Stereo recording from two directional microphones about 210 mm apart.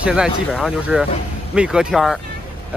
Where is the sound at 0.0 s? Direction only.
5° right (ahead or behind).